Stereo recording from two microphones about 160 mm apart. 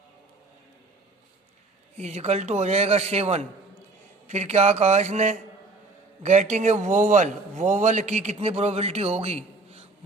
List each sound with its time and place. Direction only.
2.0 s a man's voice: 45° right (ahead or behind)